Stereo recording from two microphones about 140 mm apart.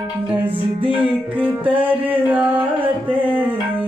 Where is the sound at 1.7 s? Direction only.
10° right (ahead or behind).